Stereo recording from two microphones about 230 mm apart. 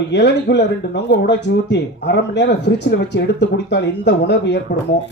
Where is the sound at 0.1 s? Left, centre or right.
Left.